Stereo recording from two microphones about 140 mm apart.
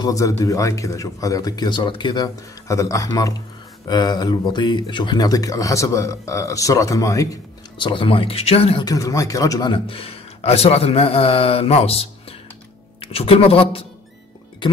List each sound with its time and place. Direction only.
0.0 s speech: 25° left (ahead or behind)
7.7 s speech: 35° left (ahead or behind)
8.8 s a man's voice: 25° left (ahead or behind); by 13.8 s 40° left (ahead or behind)